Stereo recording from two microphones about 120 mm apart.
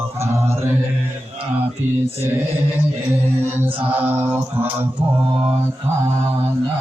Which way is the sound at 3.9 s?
15° right (ahead or behind).